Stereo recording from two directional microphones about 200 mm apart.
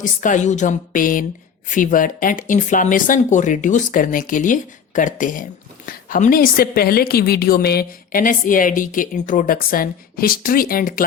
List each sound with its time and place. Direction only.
0.0 s a woman's voice: 40° left (ahead or behind)